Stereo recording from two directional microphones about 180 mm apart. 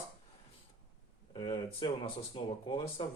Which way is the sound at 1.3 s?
25° left (ahead or behind).